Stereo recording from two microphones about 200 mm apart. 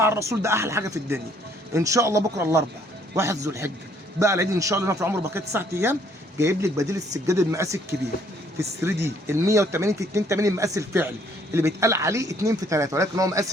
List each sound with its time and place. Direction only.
0.0 s a man's voice: 15° right (ahead or behind)